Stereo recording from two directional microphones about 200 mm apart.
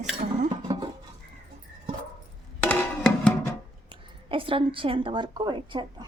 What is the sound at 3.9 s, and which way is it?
A woman's voice, 25° right (ahead or behind).